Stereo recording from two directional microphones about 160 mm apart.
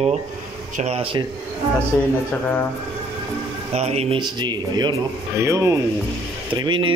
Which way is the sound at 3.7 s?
40° right (ahead or behind).